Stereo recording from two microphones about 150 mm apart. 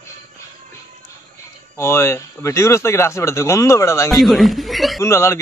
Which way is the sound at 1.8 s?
15° left (ahead or behind).